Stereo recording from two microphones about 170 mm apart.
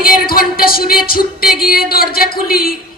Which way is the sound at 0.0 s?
60° left (ahead or behind).